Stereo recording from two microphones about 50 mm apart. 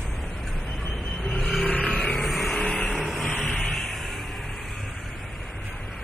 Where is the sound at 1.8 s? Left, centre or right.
Centre.